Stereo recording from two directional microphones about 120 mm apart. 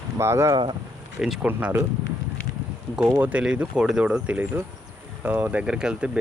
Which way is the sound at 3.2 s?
10° right (ahead or behind).